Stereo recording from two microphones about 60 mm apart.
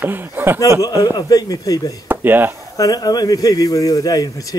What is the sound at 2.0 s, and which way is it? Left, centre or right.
Speech, right.